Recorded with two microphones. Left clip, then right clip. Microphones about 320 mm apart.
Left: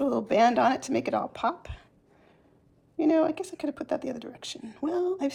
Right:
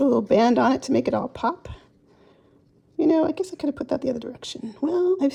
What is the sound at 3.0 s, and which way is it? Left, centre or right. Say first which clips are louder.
Speech: right 4 dB; right.